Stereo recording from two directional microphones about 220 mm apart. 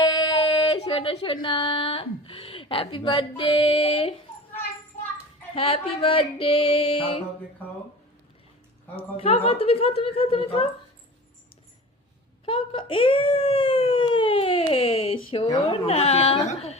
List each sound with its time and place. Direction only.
0.0 s speech: 20° left (ahead or behind)
5.5 s a woman's voice: 25° left (ahead or behind)
9.0 s a woman's voice: 25° left (ahead or behind)
12.5 s a child's voice: 25° left (ahead or behind)